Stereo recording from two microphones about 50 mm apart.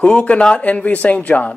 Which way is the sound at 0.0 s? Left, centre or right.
Left.